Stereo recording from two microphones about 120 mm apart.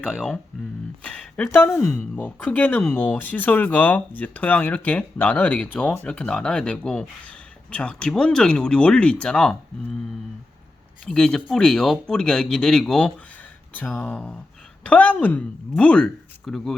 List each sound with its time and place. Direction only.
0.1 s speech: 5° left (ahead or behind)
1.5 s speech: 20° left (ahead or behind)
11.0 s speech: 5° left (ahead or behind)